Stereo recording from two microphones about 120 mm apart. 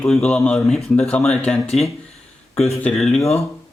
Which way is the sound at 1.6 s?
60° left (ahead or behind).